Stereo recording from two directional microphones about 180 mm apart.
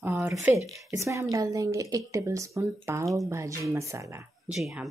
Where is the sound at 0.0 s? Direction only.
10° right (ahead or behind).